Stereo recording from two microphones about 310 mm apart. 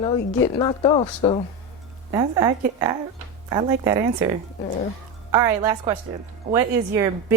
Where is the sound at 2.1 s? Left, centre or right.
Centre.